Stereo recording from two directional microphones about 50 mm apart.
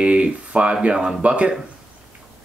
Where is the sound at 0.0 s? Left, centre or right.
Right.